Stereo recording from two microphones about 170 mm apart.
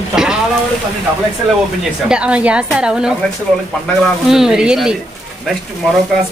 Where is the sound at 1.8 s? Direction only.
5° right (ahead or behind).